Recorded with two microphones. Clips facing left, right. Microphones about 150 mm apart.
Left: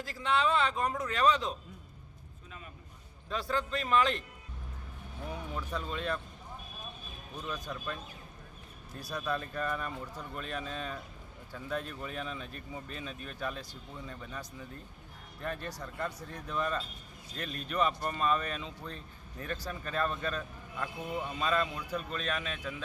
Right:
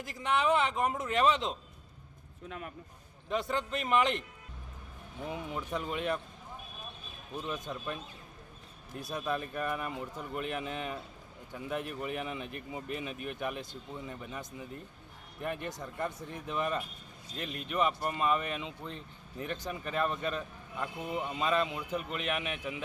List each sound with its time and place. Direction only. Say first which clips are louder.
0.0 s a man's voice: even; 20° right (ahead or behind)
2.5 s a man's voice: right 7 dB; 70° right (ahead or behind)
3.2 s a man's voice: right 1 dB; 20° right (ahead or behind)
5.3 s speech: right 2 dB; 20° right (ahead or behind)
7.4 s a man's voice: even; 20° right (ahead or behind)
9.0 s a man's voice: right 1 dB; 20° right (ahead or behind)